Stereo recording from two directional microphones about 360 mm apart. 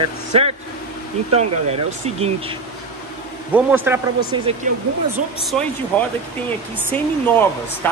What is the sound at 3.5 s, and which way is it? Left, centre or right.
Speech, centre.